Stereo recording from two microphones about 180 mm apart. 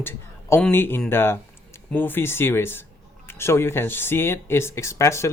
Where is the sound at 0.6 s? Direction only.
10° left (ahead or behind).